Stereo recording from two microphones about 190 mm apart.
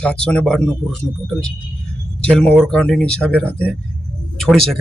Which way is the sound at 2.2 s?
5° left (ahead or behind).